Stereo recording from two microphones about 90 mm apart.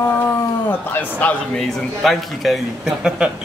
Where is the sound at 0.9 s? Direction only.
20° left (ahead or behind).